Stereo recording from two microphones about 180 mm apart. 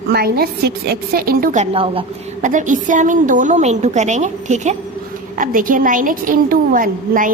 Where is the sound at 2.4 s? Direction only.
45° right (ahead or behind).